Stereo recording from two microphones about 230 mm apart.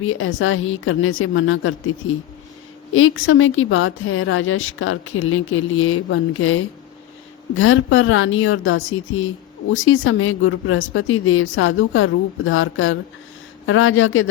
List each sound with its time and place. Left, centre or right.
0.0 s a woman's voice: left